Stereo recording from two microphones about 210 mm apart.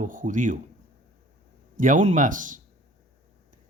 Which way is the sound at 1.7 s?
40° right (ahead or behind).